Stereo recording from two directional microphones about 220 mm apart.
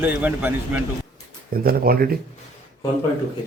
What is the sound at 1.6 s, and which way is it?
Speech, 40° right (ahead or behind).